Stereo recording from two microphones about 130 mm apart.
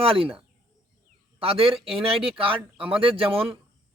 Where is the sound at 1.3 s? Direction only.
45° right (ahead or behind).